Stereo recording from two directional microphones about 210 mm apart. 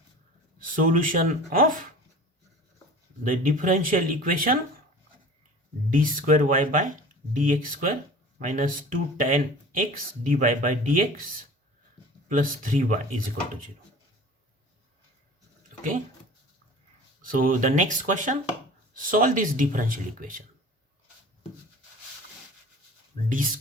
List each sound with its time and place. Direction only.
0.6 s speech: 40° right (ahead or behind)
3.2 s speech: 40° right (ahead or behind)
5.9 s speech: 40° right (ahead or behind)
12.3 s speech: 40° right (ahead or behind)
17.3 s speech: 40° right (ahead or behind)
23.3 s speech: 40° right (ahead or behind)